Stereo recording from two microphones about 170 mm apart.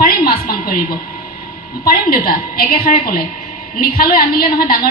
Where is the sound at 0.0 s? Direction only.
60° left (ahead or behind).